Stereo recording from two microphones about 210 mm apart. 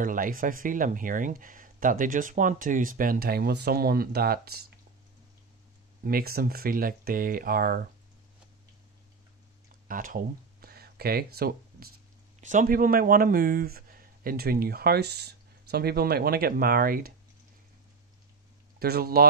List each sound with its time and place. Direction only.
0.0 s speech: 40° right (ahead or behind)
6.0 s speech: 45° right (ahead or behind)
9.8 s a sound: 40° right (ahead or behind)
11.3 s speech: 45° right (ahead or behind)
18.8 s speech: 45° right (ahead or behind)